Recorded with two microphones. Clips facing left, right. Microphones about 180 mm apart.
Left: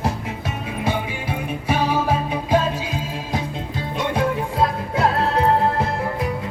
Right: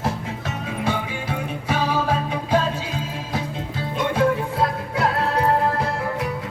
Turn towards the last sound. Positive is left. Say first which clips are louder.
# left 2 dB
turn(degrees=25)  # may be behind; listen again after turning